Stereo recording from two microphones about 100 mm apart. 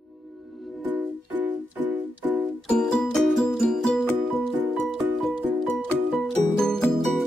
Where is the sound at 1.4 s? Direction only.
15° right (ahead or behind).